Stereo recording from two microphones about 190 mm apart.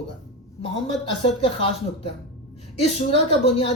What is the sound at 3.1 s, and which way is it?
Speech, 30° left (ahead or behind).